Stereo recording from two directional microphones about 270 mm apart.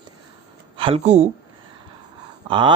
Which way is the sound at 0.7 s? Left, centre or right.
Centre.